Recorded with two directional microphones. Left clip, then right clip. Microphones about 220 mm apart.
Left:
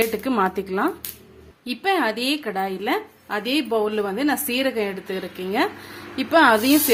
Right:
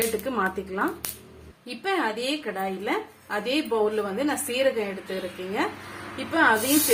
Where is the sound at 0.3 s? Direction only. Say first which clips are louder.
Left 5 dB; 40° left (ahead or behind).